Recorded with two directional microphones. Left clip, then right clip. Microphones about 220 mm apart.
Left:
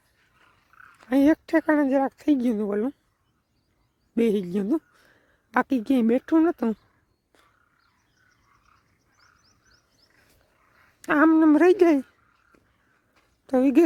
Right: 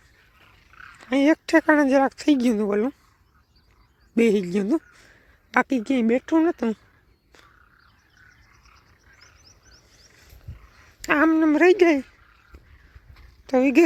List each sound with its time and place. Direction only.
0.4 s a sound: 35° left (ahead or behind)
1.5 s speech: 10° left (ahead or behind)
4.2 s speech: 15° left (ahead or behind)
9.2 s frog: 40° right (ahead or behind)
10.8 s speech: 30° left (ahead or behind)
13.5 s speech: 25° left (ahead or behind)